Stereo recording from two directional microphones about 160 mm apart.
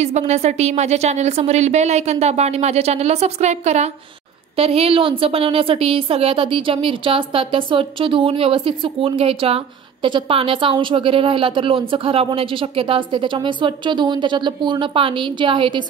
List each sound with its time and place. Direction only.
0.0 s a woman's voice: 45° right (ahead or behind)